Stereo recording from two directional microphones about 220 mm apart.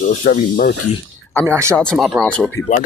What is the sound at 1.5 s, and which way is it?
Speech, 10° right (ahead or behind).